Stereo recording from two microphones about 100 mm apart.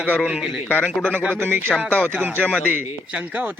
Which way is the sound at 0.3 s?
10° right (ahead or behind).